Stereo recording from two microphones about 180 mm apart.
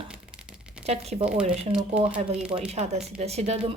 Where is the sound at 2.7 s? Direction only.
35° right (ahead or behind).